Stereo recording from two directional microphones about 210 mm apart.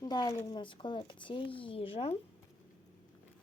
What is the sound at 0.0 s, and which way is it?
Speech, 20° left (ahead or behind).